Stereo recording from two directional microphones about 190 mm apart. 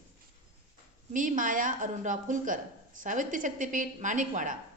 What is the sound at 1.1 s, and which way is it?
A woman's voice, 45° right (ahead or behind).